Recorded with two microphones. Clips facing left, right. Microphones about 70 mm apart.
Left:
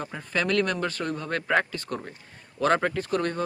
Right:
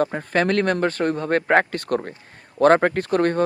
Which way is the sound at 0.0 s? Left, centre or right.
Right.